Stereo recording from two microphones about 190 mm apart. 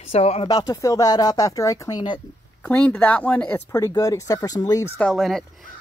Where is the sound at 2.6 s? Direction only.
5° left (ahead or behind).